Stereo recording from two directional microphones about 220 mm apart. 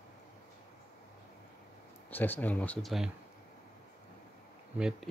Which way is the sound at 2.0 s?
10° left (ahead or behind).